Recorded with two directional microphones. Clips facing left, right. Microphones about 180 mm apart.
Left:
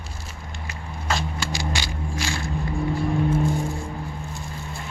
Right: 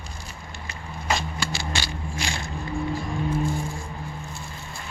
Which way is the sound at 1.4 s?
15° left (ahead or behind).